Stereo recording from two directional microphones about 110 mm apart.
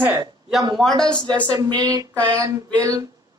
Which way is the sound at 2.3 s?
30° right (ahead or behind).